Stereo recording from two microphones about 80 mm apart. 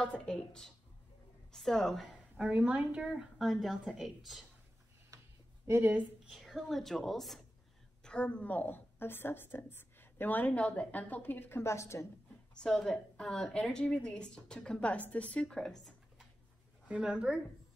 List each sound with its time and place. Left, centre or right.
0.0 s a woman's voice: centre
2.3 s a woman's voice: centre
5.1 s a sound: right
6.2 s a woman's voice: centre; by 12.1 s left
12.5 s a woman's voice: centre
16.9 s speech: centre